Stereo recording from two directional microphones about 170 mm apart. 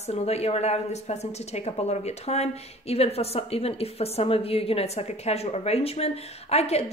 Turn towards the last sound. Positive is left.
turn(degrees=40)  # may be behind; listen again after turning